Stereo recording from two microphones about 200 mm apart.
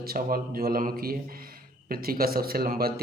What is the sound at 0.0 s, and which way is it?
A man's voice, 45° right (ahead or behind).